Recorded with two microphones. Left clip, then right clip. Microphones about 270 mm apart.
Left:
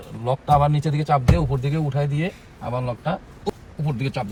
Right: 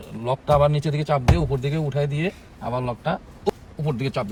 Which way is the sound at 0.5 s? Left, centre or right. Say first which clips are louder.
Even; centre.